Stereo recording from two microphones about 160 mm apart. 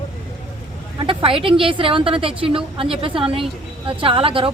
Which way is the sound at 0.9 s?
35° right (ahead or behind).